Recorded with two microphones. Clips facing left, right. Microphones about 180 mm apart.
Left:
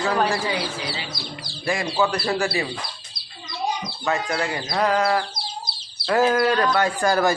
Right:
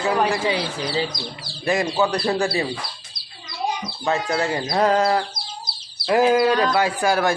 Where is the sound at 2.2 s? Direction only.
15° right (ahead or behind).